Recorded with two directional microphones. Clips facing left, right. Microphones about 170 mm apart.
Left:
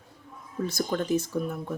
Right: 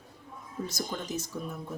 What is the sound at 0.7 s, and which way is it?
Speech, 55° left (ahead or behind).